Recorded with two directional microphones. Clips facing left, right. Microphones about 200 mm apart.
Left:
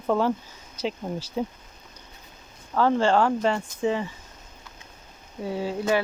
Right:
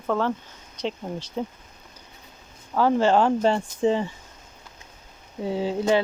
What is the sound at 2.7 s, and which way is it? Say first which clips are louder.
Speech: right 1 dB; 10° right (ahead or behind).